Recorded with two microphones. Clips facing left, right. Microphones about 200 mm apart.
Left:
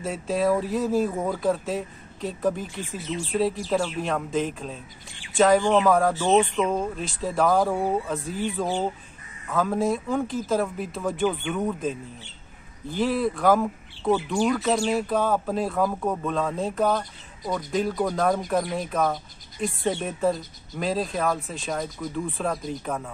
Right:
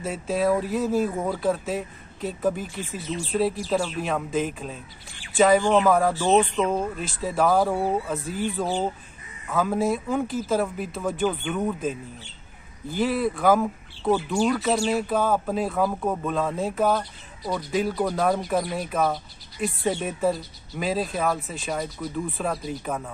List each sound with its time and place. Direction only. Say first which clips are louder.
0.0 s speech: even; centre (ahead or behind)